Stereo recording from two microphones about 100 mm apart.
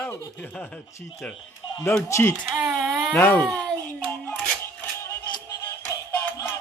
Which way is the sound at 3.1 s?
20° left (ahead or behind).